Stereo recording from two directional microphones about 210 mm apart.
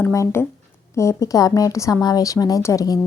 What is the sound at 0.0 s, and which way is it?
A woman's voice, 15° left (ahead or behind).